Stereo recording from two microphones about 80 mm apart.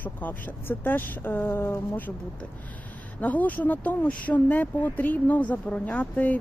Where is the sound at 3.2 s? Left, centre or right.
Centre.